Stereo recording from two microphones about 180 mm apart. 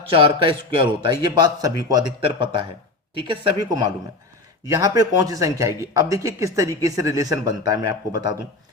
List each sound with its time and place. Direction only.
0.4 s speech: 25° right (ahead or behind)